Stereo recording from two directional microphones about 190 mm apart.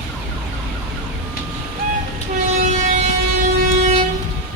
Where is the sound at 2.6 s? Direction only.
40° right (ahead or behind).